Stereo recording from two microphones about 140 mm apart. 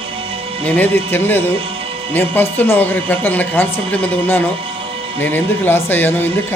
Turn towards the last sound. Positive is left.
turn(degrees=15)  # may be behind; listen again after turning